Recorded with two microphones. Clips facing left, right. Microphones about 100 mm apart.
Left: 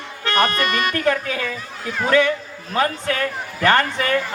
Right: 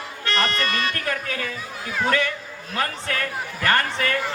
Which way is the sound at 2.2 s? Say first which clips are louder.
Left 8 dB; 35° left (ahead or behind).